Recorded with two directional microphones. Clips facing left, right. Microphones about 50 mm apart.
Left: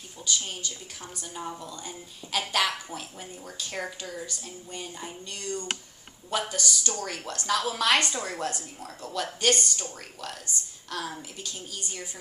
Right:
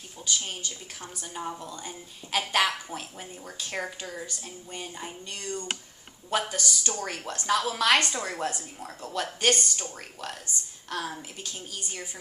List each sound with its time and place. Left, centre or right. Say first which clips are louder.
0.3 s speech: even; right